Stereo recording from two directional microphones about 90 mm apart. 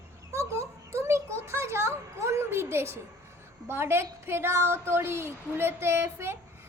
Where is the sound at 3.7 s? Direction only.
25° right (ahead or behind).